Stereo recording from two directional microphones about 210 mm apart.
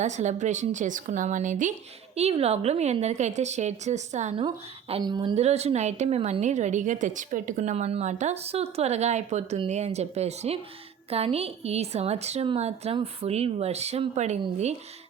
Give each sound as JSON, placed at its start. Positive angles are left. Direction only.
{"t": 0.0, "sound": "a woman's voice", "side_deg": -35}
{"t": 4.4, "sound": "a woman's voice", "side_deg": -25}
{"t": 5.4, "sound": "a woman's voice", "side_deg": -30}